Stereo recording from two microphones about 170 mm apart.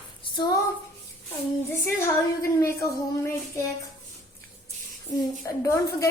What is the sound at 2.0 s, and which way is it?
A woman's voice, 15° left (ahead or behind).